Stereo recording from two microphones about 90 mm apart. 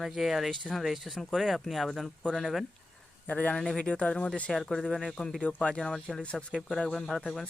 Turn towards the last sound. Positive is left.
turn(degrees=0)  # may be behind; listen again after turning